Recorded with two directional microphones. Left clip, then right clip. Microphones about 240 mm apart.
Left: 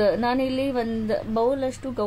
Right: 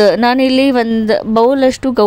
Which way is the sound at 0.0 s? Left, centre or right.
Right.